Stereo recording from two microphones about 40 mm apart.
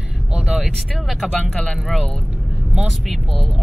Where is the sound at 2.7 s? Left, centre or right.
Centre.